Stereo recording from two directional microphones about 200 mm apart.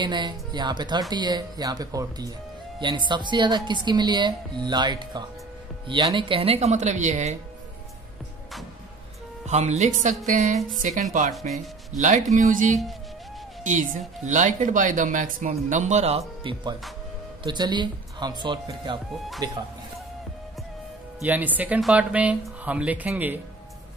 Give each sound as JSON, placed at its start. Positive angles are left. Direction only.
{"t": 0.0, "sound": "speech", "side_deg": -20}
{"t": 9.5, "sound": "speech", "side_deg": -35}
{"t": 11.3, "sound": "speech", "side_deg": 0}
{"t": 12.4, "sound": "speech", "side_deg": -40}
{"t": 21.2, "sound": "speech", "side_deg": -10}